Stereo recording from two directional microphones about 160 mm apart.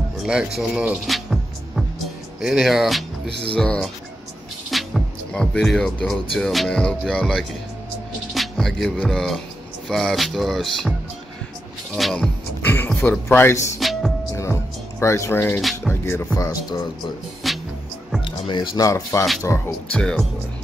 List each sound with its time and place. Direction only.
0.2 s music: 5° right (ahead or behind)
2.4 s speech: centre (ahead or behind)
4.6 s music: centre (ahead or behind)
6.3 s speech: centre (ahead or behind)
8.4 s music: centre (ahead or behind)
9.8 s speech: centre (ahead or behind)
11.9 s music: centre (ahead or behind)
13.3 s speech: 15° left (ahead or behind)
13.7 s music: centre (ahead or behind)
14.3 s music: 15° left (ahead or behind)
16.3 s speech: 20° left (ahead or behind)
17.4 s music: centre (ahead or behind)
18.2 s speech: 30° left (ahead or behind)
20.0 s speech: 5° left (ahead or behind)